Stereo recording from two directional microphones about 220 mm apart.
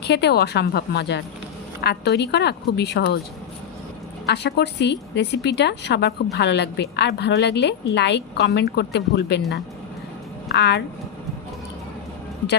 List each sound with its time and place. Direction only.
0.0 s a woman's voice: 50° left (ahead or behind)
4.3 s a woman's voice: 50° left (ahead or behind)
10.5 s a woman's voice: 50° left (ahead or behind)